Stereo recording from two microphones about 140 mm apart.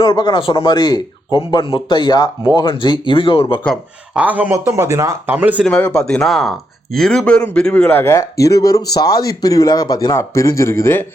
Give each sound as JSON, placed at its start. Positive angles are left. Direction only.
{"t": 0.0, "sound": "a man's voice", "side_deg": 30}
{"t": 4.1, "sound": "speech", "side_deg": -10}
{"t": 4.5, "sound": "speech", "side_deg": -25}
{"t": 5.6, "sound": "speech", "side_deg": 5}